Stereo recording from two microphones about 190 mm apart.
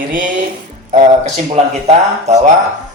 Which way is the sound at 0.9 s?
35° right (ahead or behind).